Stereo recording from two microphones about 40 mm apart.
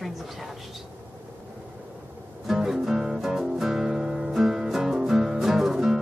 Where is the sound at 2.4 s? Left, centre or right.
Centre.